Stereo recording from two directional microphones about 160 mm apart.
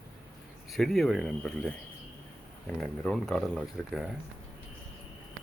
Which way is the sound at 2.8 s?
5° left (ahead or behind).